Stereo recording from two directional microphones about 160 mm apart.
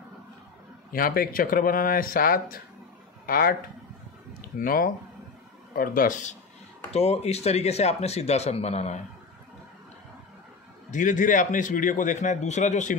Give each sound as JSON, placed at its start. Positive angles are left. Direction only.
{"t": 0.9, "sound": "speech", "side_deg": 65}
{"t": 4.6, "sound": "speech", "side_deg": 65}
{"t": 6.9, "sound": "speech", "side_deg": 40}
{"t": 10.9, "sound": "a man's voice", "side_deg": 55}